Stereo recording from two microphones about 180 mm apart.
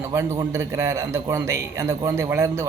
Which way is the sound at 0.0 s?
15° right (ahead or behind).